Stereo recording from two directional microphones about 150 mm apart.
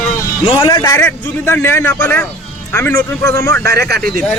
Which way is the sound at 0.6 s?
25° left (ahead or behind).